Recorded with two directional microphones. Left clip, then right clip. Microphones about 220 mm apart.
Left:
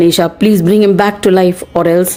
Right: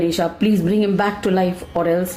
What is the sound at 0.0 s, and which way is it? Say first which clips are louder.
A woman's voice: left 9 dB; 45° left (ahead or behind).